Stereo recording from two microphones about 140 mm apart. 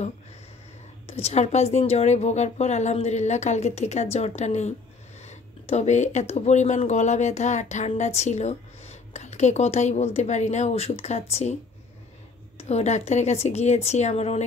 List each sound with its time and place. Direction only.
1.0 s a woman's voice: 45° left (ahead or behind)
12.5 s a woman's voice: 50° left (ahead or behind)